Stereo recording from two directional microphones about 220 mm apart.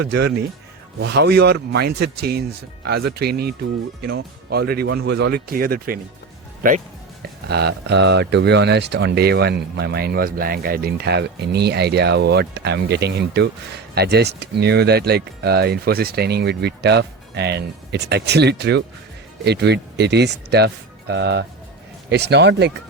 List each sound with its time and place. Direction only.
0.0 s speech: 50° right (ahead or behind)